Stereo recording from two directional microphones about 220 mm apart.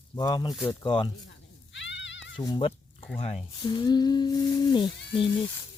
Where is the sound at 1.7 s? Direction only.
55° left (ahead or behind).